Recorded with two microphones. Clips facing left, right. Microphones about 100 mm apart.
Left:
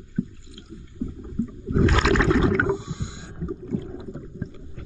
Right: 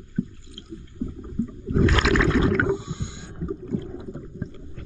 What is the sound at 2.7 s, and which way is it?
Whale vocalization, 20° left (ahead or behind).